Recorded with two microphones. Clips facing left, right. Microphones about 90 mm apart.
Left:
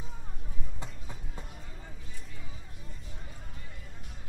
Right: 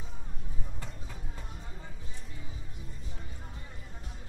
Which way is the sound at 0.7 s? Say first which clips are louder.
Left 3 dB; 20° left (ahead or behind).